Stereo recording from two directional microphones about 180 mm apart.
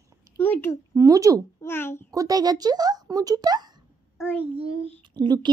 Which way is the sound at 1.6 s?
10° left (ahead or behind).